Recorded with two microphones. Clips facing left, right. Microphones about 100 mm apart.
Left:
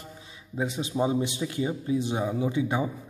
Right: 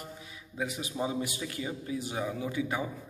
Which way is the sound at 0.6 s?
25° left (ahead or behind).